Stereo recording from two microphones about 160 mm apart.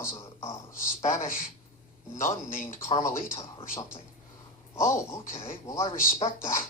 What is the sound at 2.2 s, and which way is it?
A man's voice, 15° left (ahead or behind).